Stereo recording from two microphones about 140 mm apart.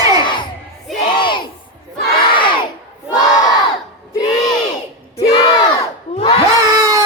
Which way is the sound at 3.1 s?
25° left (ahead or behind).